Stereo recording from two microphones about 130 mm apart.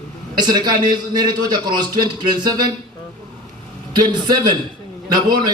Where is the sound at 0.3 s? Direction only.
35° right (ahead or behind).